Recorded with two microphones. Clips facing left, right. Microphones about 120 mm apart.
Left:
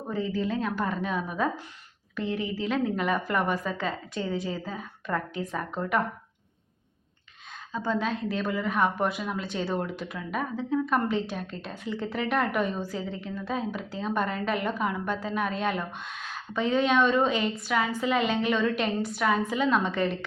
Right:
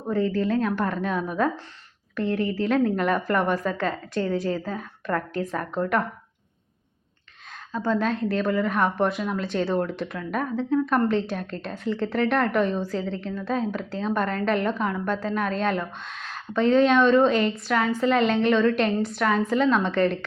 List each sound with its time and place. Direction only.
0.1 s a woman's voice: 5° left (ahead or behind)
7.7 s a woman's voice: centre (ahead or behind)